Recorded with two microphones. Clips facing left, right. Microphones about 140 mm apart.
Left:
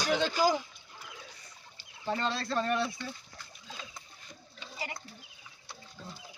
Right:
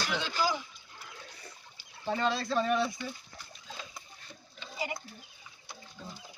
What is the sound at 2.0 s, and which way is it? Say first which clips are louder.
Speech: right 2 dB; 5° right (ahead or behind).